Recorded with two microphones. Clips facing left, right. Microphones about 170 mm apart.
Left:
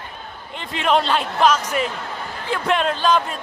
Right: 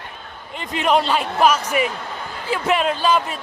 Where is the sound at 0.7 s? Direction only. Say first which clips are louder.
Right 1 dB; 5° right (ahead or behind).